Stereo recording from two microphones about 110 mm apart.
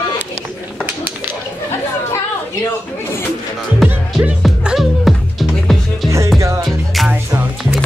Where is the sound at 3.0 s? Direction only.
20° left (ahead or behind).